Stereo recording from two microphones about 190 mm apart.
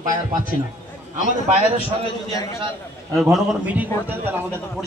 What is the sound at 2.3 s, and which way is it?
Speech, 20° left (ahead or behind).